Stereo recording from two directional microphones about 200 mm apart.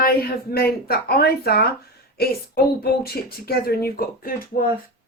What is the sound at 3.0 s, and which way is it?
A woman's voice, 50° left (ahead or behind).